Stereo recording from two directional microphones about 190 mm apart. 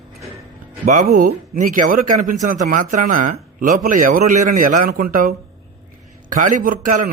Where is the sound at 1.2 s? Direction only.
45° right (ahead or behind).